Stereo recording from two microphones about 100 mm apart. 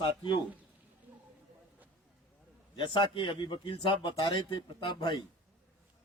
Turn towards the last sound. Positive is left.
turn(degrees=50)  # may be behind; listen again after turning